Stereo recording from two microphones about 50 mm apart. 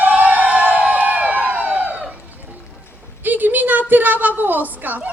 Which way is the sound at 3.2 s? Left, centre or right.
Right.